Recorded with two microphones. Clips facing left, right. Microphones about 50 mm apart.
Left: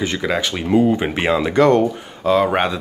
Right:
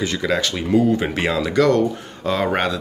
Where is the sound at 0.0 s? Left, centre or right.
Centre.